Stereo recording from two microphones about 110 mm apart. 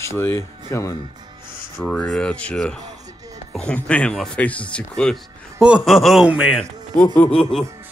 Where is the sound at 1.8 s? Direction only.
5° left (ahead or behind).